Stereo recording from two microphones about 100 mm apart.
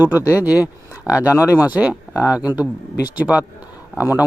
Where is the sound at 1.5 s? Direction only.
15° right (ahead or behind).